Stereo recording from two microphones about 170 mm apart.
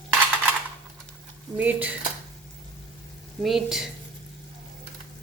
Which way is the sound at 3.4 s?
Centre (ahead or behind).